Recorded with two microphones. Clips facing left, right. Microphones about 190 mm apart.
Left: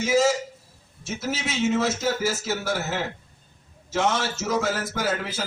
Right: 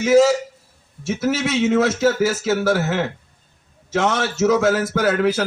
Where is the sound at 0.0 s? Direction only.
65° right (ahead or behind).